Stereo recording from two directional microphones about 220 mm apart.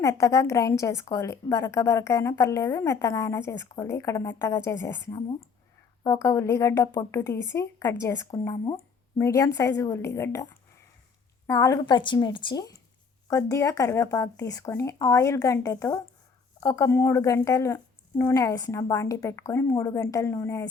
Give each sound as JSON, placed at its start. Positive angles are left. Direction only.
{"t": 0.0, "sound": "a woman's voice", "side_deg": 15}
{"t": 11.4, "sound": "a woman's voice", "side_deg": 15}